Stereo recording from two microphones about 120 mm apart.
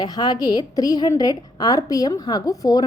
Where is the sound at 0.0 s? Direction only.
35° left (ahead or behind).